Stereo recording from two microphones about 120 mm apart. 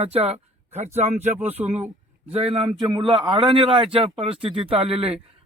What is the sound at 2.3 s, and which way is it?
Speech, 50° right (ahead or behind).